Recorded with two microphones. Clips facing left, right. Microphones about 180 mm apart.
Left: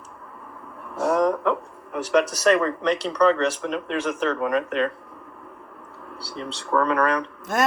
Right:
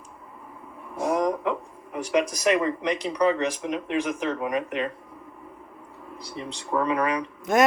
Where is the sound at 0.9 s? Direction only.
10° right (ahead or behind).